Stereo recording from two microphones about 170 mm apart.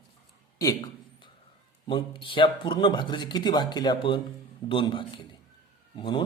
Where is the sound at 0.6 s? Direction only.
20° left (ahead or behind).